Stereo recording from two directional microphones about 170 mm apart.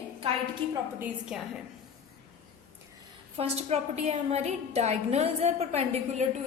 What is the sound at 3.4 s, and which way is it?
A woman's voice, 40° right (ahead or behind).